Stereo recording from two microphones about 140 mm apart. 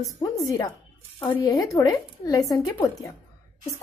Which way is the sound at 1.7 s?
25° left (ahead or behind).